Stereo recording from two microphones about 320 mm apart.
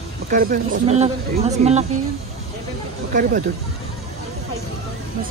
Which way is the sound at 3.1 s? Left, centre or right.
Right.